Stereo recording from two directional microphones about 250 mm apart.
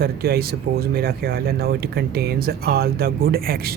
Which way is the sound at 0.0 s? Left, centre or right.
Right.